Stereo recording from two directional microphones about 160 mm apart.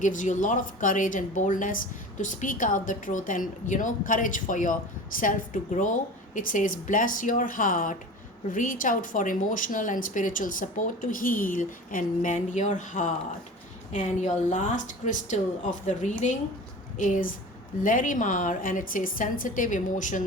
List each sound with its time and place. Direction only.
0.0 s a woman's voice: 55° left (ahead or behind)